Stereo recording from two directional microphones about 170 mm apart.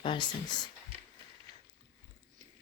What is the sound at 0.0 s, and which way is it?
Speech, 30° left (ahead or behind).